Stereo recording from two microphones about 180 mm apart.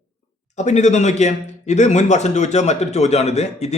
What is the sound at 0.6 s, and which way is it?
A man's voice, 40° left (ahead or behind).